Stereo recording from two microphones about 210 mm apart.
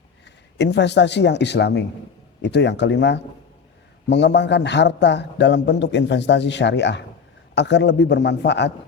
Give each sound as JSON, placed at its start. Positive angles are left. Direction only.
{"t": 0.6, "sound": "a man's voice", "side_deg": 55}